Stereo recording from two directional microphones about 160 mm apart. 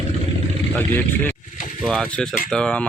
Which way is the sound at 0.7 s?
10° left (ahead or behind).